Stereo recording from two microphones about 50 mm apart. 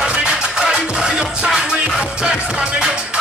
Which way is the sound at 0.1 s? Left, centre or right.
Centre.